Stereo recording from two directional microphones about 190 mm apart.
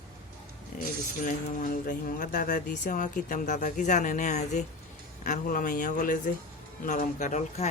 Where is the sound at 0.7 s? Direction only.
45° left (ahead or behind).